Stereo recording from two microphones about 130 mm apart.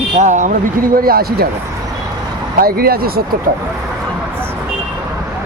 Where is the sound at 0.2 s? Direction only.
70° right (ahead or behind); by 1.0 s 90° right.